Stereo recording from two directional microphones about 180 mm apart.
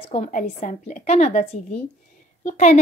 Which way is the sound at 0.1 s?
40° left (ahead or behind).